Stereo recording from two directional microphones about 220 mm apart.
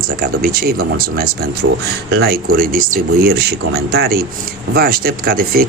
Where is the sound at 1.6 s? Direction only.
65° right (ahead or behind).